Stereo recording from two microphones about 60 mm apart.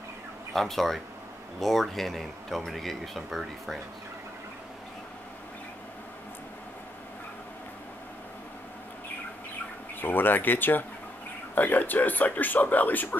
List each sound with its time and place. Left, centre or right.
0.5 s speech: centre
9.9 s speech: left